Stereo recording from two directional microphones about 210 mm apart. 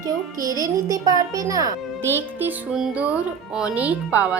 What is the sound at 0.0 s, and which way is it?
A woman's voice, 15° right (ahead or behind).